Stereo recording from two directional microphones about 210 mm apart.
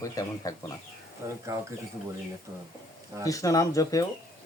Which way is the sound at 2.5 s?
20° right (ahead or behind).